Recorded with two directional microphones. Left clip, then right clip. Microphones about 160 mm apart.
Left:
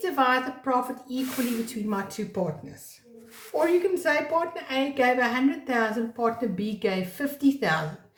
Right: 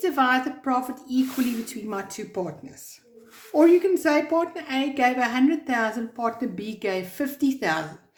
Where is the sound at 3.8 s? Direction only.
55° right (ahead or behind).